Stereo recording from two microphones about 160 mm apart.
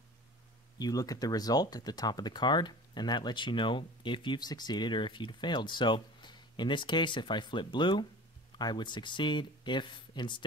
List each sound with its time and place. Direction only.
0.7 s speech: 25° left (ahead or behind)